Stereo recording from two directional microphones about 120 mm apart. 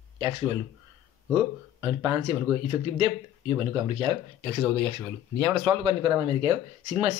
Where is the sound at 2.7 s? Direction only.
30° right (ahead or behind).